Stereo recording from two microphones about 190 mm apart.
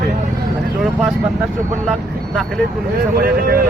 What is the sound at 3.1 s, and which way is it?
Speech, 50° right (ahead or behind).